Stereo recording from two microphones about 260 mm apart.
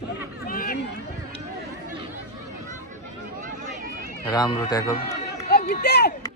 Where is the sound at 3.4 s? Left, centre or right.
Right.